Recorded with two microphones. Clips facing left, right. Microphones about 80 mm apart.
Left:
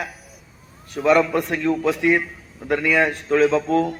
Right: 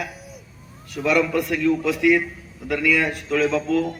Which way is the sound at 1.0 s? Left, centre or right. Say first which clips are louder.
Left 3 dB; left.